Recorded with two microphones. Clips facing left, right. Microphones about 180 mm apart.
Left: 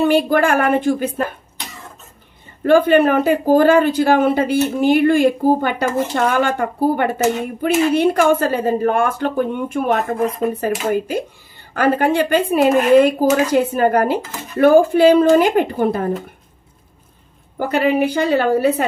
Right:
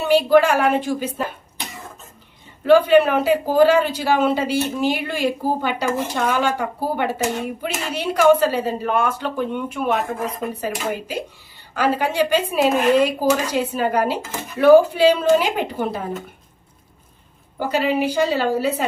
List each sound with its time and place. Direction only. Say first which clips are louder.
0.0 s speech: even; 50° left (ahead or behind)
2.6 s speech: left 1 dB; 50° left (ahead or behind)
17.6 s a woman's voice: left 4 dB; 55° left (ahead or behind)